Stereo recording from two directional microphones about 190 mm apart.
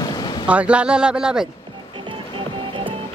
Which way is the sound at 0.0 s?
20° left (ahead or behind).